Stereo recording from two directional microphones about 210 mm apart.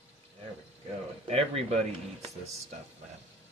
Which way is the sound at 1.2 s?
30° right (ahead or behind).